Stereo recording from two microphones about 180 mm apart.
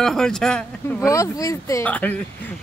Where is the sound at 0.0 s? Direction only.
Centre (ahead or behind).